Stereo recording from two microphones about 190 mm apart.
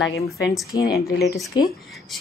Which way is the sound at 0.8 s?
55° left (ahead or behind).